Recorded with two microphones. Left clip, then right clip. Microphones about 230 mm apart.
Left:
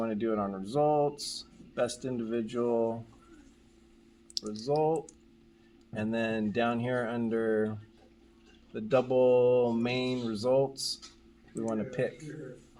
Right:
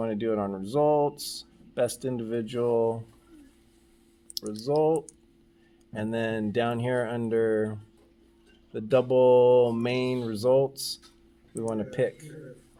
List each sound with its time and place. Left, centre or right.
0.0 s speech: right
4.6 s speech: right